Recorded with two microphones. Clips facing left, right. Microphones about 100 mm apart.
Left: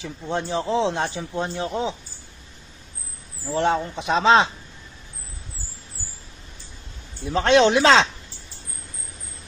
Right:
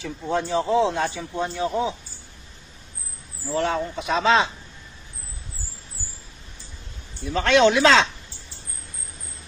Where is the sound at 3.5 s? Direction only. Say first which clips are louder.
Left 2 dB; 30° left (ahead or behind).